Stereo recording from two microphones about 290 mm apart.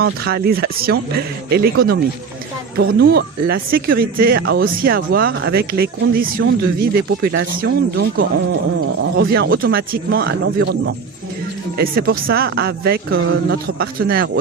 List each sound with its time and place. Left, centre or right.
0.0 s speech: right
2.8 s speech: right
13.7 s speech: right